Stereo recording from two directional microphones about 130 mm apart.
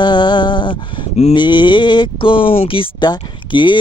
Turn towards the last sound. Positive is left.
turn(degrees=35)  # may be behind; listen again after turning